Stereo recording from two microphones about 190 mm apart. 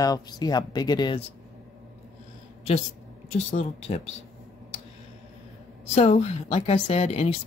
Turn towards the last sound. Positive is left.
turn(degrees=30)  # may be behind; listen again after turning